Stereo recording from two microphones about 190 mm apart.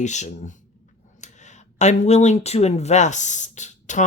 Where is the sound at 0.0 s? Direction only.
40° left (ahead or behind).